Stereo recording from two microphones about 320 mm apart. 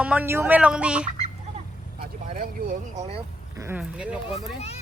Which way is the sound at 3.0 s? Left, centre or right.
Centre.